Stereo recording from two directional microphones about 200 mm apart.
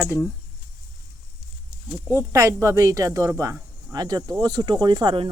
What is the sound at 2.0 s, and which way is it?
Speech, 15° right (ahead or behind).